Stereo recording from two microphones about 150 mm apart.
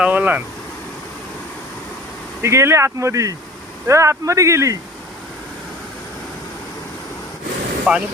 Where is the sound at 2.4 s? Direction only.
20° right (ahead or behind).